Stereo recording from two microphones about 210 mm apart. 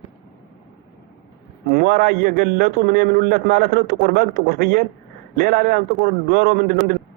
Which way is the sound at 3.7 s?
50° right (ahead or behind).